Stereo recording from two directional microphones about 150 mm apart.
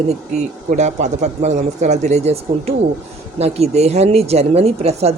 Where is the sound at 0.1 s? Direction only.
50° right (ahead or behind).